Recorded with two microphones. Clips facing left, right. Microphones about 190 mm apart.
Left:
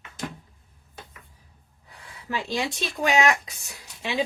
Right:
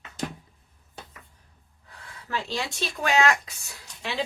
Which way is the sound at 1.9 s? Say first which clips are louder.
Left 1 dB; 15° left (ahead or behind).